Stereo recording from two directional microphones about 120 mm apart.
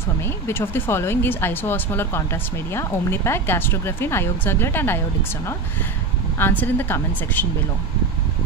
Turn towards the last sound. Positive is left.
turn(degrees=15)  # may be behind; listen again after turning